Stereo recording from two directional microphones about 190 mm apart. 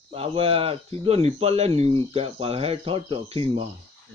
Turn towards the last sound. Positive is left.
turn(degrees=-30)  # may be behind; listen again after turning